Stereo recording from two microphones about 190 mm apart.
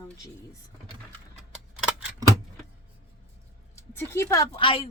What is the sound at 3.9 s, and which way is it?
Speech, 15° left (ahead or behind).